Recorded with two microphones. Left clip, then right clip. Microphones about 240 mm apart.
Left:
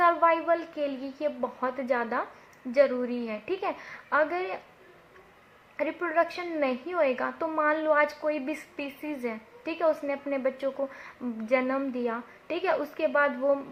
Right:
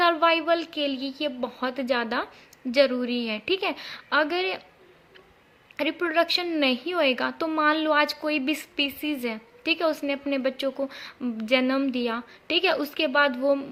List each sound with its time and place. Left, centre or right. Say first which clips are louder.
0.0 s a woman's voice: right 2 dB; right
3.2 s a woman's voice: right 5 dB; right
5.7 s a woman's voice: right 3 dB; right